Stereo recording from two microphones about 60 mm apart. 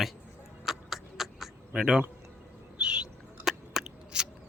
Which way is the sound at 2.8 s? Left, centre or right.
Centre.